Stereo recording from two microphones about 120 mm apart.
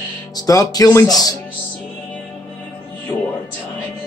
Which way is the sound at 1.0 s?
30° left (ahead or behind).